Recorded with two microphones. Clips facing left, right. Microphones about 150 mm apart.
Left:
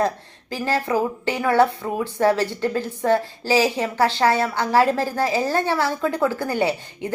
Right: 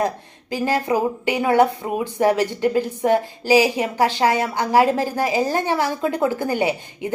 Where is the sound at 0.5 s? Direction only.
15° right (ahead or behind).